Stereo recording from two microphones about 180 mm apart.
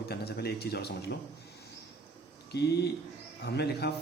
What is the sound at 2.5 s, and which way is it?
A man's voice, 65° left (ahead or behind).